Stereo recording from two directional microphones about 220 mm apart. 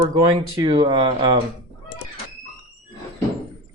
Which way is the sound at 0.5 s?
20° right (ahead or behind).